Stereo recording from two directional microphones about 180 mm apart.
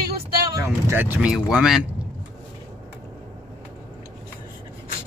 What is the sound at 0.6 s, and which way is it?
A man's voice, 10° right (ahead or behind).